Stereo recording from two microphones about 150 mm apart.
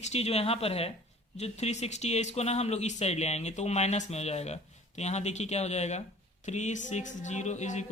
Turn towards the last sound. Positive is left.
turn(degrees=50)  # may be behind; listen again after turning